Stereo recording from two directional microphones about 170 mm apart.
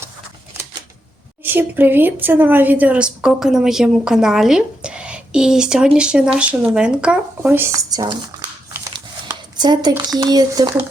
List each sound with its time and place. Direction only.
1.5 s a woman's voice: 10° right (ahead or behind)
9.6 s speech: 25° right (ahead or behind)